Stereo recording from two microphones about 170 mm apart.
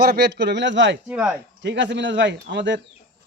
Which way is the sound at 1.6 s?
90° right.